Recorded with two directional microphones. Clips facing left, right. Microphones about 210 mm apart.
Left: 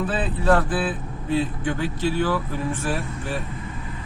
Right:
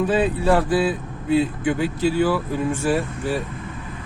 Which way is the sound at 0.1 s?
10° right (ahead or behind).